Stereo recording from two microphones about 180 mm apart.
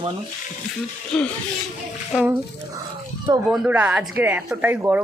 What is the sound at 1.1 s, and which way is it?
A man's voice, 5° left (ahead or behind).